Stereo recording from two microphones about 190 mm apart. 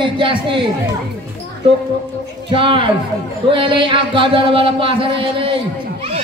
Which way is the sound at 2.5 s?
25° right (ahead or behind).